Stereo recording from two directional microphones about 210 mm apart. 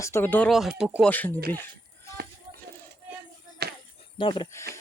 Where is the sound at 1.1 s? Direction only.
10° left (ahead or behind).